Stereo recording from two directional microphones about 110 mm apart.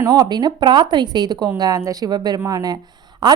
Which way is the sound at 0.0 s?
35° right (ahead or behind).